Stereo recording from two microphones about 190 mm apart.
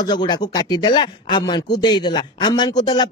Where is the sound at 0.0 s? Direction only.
25° left (ahead or behind).